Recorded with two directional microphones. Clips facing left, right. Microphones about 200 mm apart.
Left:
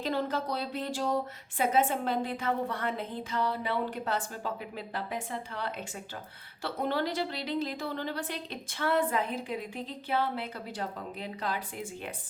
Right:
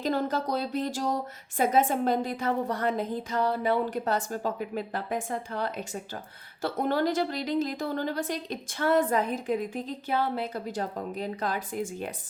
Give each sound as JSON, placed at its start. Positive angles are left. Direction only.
{"t": 0.0, "sound": "a woman's voice", "side_deg": -45}